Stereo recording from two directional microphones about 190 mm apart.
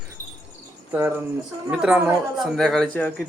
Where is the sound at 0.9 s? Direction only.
10° right (ahead or behind).